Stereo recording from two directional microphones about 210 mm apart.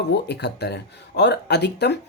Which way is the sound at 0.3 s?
50° left (ahead or behind).